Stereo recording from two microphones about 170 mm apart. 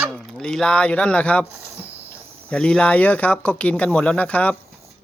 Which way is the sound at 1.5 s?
10° right (ahead or behind).